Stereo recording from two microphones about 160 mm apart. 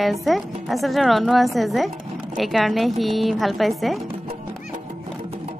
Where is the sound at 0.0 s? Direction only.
Centre (ahead or behind).